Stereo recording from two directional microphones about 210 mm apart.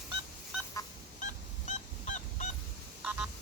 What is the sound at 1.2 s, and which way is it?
Goose, 35° left (ahead or behind).